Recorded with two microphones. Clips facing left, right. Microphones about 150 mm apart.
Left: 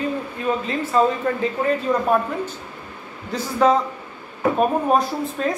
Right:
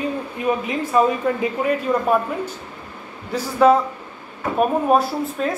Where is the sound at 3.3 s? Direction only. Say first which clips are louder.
Right 3 dB; 10° right (ahead or behind).